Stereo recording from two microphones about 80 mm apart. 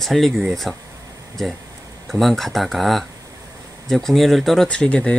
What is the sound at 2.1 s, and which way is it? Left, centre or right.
Speech, centre.